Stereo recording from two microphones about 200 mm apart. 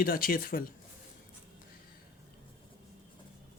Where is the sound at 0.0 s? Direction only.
45° left (ahead or behind).